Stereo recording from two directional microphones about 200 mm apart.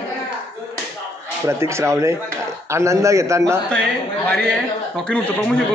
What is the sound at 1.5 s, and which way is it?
A man's voice, 15° right (ahead or behind).